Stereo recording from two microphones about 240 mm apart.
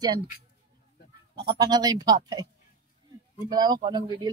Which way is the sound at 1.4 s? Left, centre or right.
Centre.